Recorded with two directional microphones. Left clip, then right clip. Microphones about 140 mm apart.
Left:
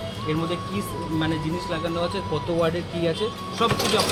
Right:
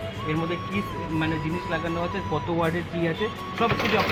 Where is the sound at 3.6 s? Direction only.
20° right (ahead or behind).